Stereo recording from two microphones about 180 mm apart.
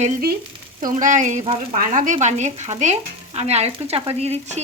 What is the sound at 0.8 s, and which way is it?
Speech, 50° right (ahead or behind).